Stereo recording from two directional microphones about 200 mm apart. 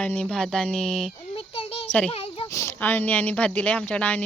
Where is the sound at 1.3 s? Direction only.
30° left (ahead or behind).